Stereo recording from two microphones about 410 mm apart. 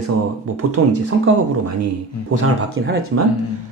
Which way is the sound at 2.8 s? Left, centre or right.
Right.